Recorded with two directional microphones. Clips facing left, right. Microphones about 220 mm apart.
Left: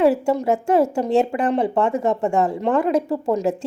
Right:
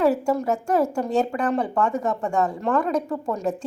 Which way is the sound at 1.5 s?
25° left (ahead or behind).